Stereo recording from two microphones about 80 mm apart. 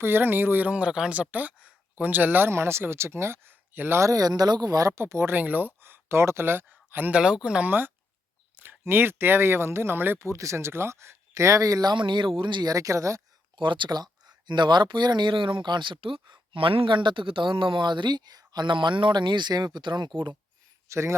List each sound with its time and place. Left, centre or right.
0.0 s speech: right
4.1 s speech: right
5.4 s speech: right
7.4 s speech: centre
7.7 s speech: right
8.6 s a sound: right
8.9 s speech: right
11.9 s speech: right
12.6 s speech: right
13.6 s speech: right
20.8 s speech: right